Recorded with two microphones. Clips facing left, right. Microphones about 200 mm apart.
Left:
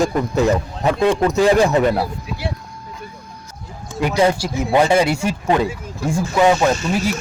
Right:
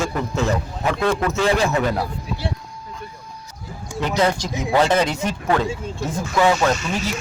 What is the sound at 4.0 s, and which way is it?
A man's voice, 10° left (ahead or behind).